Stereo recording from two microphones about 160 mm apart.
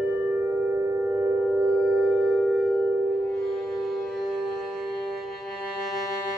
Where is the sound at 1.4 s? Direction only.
5° right (ahead or behind).